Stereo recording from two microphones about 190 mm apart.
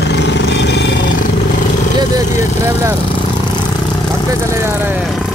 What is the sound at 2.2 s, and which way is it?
Speech, 15° right (ahead or behind).